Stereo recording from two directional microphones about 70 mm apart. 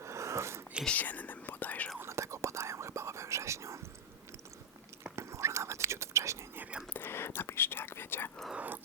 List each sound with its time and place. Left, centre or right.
0.0 s a sound: right
0.9 s whispering: left
2.0 s whispering: right
5.0 s whispering: right
6.6 s whispering: centre
6.9 s whispering: left
8.5 s a sound: right